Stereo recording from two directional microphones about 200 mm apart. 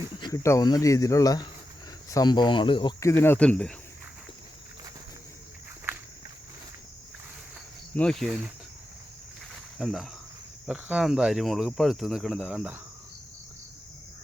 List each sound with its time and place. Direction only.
0.2 s speech: 20° left (ahead or behind)
7.9 s speech: 5° left (ahead or behind)
9.7 s speech: 5° right (ahead or behind)